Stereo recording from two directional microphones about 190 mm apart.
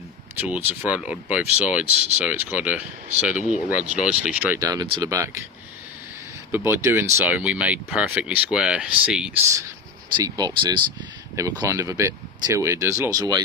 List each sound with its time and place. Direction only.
0.3 s speech: 10° right (ahead or behind)
6.5 s speech: 15° right (ahead or behind)
10.2 s speech: 20° right (ahead or behind)